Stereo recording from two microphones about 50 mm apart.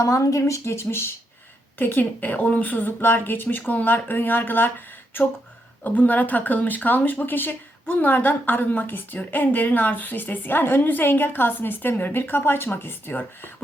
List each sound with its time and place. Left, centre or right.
0.2 s speech: left
1.8 s a woman's voice: left
5.8 s a woman's voice: left